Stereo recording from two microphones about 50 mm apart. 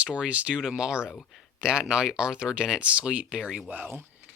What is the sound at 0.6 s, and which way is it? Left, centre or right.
Speech, centre.